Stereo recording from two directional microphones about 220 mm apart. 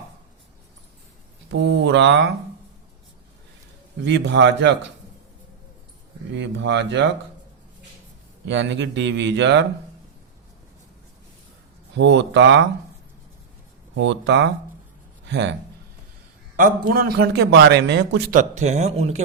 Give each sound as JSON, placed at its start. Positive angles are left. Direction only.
{"t": 1.5, "sound": "a man's voice", "side_deg": -55}
{"t": 4.0, "sound": "a man's voice", "side_deg": -55}
{"t": 6.3, "sound": "a man's voice", "side_deg": -55}
{"t": 8.4, "sound": "speech", "side_deg": -55}
{"t": 11.9, "sound": "speech", "side_deg": -55}
{"t": 13.9, "sound": "a man's voice", "side_deg": -55}
{"t": 16.6, "sound": "a man's voice", "side_deg": -40}
{"t": 18.3, "sound": "speech", "side_deg": -30}